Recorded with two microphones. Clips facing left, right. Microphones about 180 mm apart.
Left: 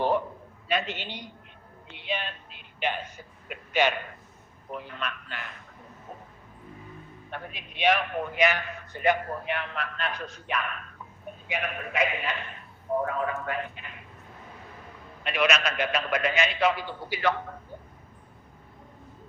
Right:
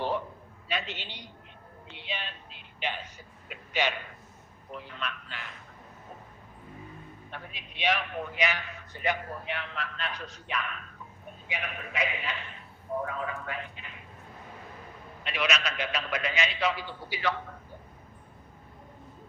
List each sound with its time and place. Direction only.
0.7 s a man's voice: 50° left (ahead or behind)
1.9 s a sound: 55° left (ahead or behind)
4.7 s a man's voice: 55° left (ahead or behind)
7.3 s a man's voice: 50° left (ahead or behind)
15.2 s a man's voice: 55° left (ahead or behind)